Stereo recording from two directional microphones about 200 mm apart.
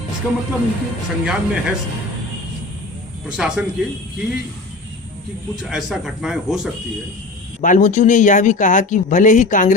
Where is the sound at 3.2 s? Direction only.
5° right (ahead or behind).